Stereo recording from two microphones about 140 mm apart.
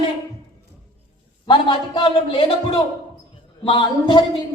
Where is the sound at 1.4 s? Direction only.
35° left (ahead or behind).